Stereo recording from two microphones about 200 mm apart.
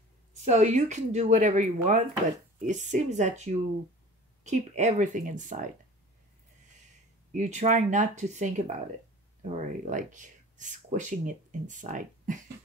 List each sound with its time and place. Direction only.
0.5 s speech: 35° right (ahead or behind)
7.3 s speech: 35° right (ahead or behind)